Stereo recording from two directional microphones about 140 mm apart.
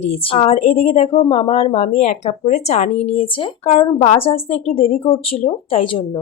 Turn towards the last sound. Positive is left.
turn(degrees=40)  # may be behind; listen again after turning